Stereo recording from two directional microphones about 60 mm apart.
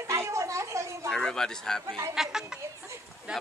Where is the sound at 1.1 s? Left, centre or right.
Centre.